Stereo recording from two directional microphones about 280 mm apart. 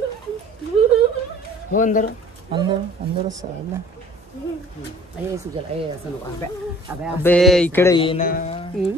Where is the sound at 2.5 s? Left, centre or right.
Centre.